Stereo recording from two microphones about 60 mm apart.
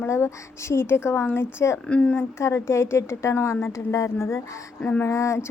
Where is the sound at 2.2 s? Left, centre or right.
Left.